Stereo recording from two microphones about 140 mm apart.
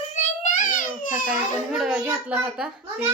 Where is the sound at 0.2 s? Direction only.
65° left (ahead or behind).